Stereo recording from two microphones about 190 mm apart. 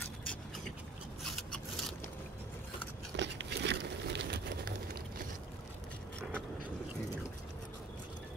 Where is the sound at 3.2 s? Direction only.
65° right (ahead or behind).